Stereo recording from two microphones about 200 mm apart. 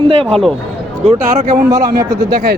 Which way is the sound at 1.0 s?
35° right (ahead or behind).